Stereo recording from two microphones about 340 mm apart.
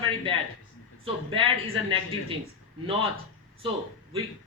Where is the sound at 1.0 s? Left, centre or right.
Centre.